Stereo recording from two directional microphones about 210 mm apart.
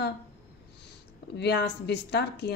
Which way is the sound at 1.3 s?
55° left (ahead or behind).